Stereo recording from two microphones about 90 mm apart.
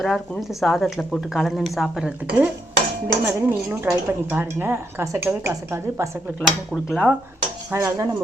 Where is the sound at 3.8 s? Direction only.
30° right (ahead or behind).